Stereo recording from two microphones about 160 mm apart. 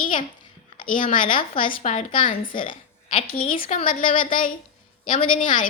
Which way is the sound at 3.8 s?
55° left (ahead or behind).